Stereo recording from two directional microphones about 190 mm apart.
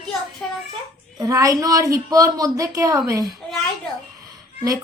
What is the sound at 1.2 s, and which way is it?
A woman's voice, 20° right (ahead or behind).